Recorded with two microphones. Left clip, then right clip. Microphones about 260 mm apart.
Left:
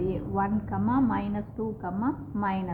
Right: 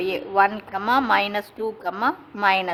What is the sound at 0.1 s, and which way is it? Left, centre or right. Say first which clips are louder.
A woman's voice: right 10 dB; right.